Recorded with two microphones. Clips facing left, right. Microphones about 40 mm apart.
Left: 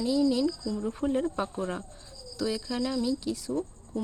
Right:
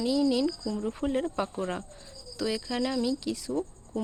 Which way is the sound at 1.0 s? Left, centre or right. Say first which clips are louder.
Left 1 dB; right.